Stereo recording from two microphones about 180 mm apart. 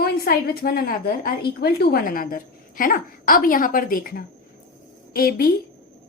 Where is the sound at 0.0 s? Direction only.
55° left (ahead or behind).